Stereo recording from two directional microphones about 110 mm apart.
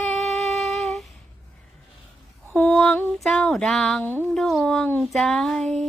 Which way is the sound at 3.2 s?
5° left (ahead or behind).